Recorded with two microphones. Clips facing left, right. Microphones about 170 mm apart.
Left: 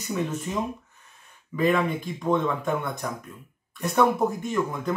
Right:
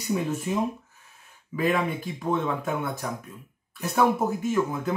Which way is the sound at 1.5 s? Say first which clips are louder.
Left 2 dB; 5° right (ahead or behind).